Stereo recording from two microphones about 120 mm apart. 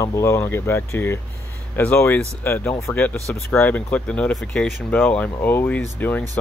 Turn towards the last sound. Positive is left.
turn(degrees=15)  # may be behind; listen again after turning